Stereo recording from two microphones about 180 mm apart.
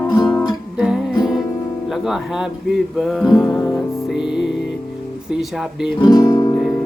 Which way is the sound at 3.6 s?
20° left (ahead or behind).